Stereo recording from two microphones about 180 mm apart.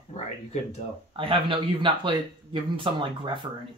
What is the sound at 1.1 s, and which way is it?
Speech, 30° right (ahead or behind).